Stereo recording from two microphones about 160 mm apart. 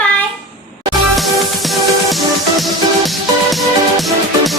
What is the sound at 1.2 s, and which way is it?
Music, centre (ahead or behind).